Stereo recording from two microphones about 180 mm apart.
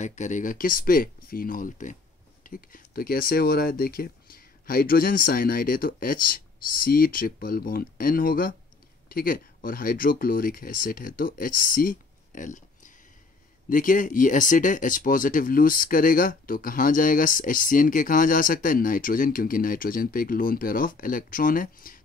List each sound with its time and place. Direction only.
0.0 s speech: 40° left (ahead or behind)